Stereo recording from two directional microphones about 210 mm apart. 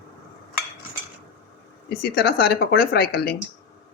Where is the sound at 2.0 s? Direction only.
45° left (ahead or behind).